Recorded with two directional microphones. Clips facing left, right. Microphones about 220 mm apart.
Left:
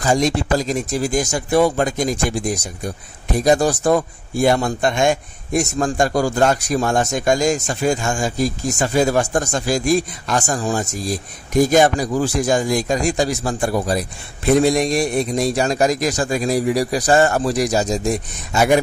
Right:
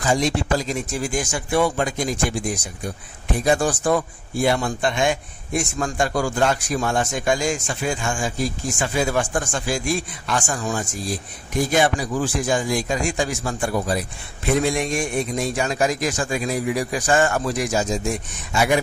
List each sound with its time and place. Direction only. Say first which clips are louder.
0.0 s a man's voice: left 3 dB; 40° left (ahead or behind)